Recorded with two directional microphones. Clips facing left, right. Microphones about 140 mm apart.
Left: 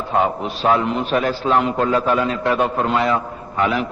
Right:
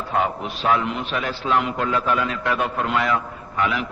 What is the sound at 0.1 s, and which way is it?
A man's voice, 30° left (ahead or behind).